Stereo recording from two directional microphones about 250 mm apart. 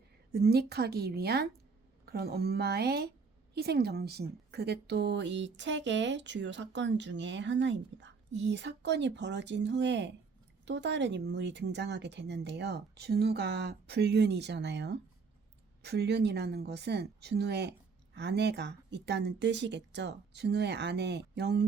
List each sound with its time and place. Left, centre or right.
0.3 s a woman's voice: right